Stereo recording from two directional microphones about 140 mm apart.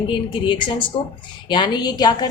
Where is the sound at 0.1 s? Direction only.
35° left (ahead or behind).